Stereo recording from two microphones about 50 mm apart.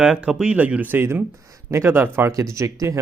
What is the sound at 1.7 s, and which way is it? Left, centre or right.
Speech, right.